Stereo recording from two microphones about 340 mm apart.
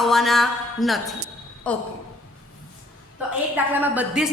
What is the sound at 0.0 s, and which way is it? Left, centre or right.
A woman's voice, centre.